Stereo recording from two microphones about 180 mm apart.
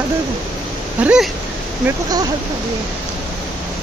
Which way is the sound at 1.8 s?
20° right (ahead or behind).